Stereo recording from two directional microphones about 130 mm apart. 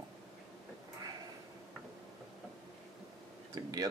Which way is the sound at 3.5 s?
30° right (ahead or behind).